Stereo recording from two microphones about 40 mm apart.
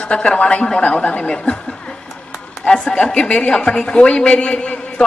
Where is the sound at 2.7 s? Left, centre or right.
Left.